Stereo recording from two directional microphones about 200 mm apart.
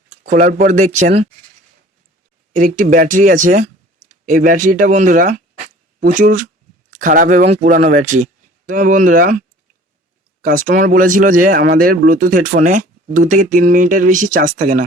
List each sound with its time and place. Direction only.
0.1 s speech: 40° right (ahead or behind)
2.5 s speech: 40° right (ahead or behind)
10.4 s speech: 40° right (ahead or behind)